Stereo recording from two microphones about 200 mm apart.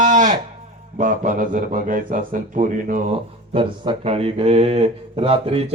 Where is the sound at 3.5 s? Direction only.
25° right (ahead or behind).